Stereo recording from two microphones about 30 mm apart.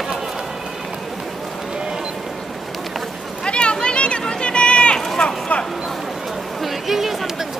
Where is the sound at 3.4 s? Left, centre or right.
Left.